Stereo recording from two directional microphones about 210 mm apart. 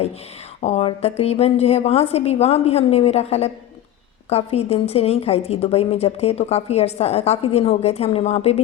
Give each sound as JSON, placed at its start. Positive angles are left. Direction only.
{"t": 0.6, "sound": "a woman's voice", "side_deg": 30}